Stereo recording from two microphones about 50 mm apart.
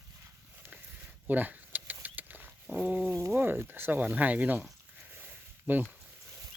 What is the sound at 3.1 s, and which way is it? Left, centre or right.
Speech, right.